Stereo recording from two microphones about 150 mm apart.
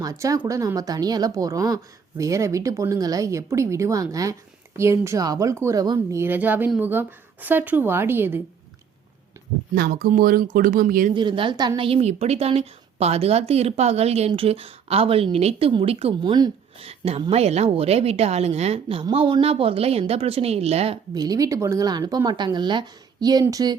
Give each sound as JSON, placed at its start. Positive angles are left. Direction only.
{"t": 0.0, "sound": "a woman's voice", "side_deg": -25}
{"t": 9.7, "sound": "speech", "side_deg": -85}
{"t": 11.1, "sound": "a woman's voice", "side_deg": -30}
{"t": 17.1, "sound": "a woman's voice", "side_deg": -40}
{"t": 21.1, "sound": "speech", "side_deg": -25}